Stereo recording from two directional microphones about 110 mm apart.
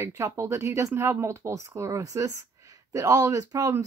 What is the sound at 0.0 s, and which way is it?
Speech, 25° right (ahead or behind).